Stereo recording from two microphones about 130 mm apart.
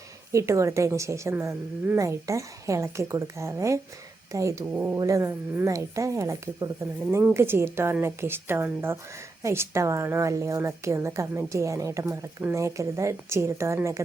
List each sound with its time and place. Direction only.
0.3 s a woman's voice: 25° right (ahead or behind)
4.9 s a woman's voice: 25° right (ahead or behind)